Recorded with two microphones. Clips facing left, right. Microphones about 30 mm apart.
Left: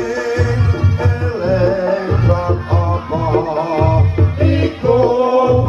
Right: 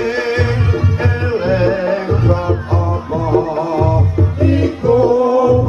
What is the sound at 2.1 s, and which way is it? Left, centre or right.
Music, centre.